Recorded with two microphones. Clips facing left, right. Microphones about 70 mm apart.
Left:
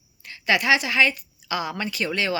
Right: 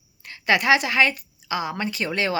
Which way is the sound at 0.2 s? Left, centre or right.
Right.